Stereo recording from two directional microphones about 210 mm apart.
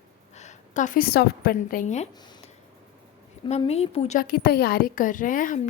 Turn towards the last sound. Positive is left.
turn(degrees=40)  # may be behind; listen again after turning